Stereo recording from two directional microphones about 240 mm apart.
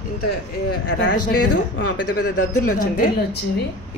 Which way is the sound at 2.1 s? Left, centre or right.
Left.